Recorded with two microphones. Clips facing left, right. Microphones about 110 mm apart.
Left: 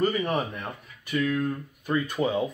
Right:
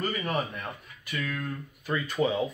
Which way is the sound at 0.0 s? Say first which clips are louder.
Left 7 dB; 20° left (ahead or behind).